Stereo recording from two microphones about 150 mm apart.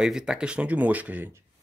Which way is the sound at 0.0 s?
5° right (ahead or behind).